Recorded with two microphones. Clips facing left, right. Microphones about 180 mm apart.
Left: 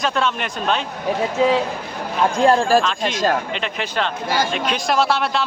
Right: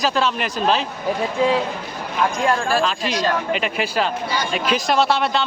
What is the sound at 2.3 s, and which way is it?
Speech, 35° left (ahead or behind).